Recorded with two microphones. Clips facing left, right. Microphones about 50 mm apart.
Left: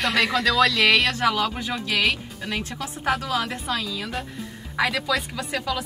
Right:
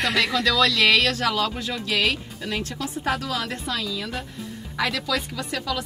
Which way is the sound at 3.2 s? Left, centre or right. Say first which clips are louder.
Left 2 dB; centre.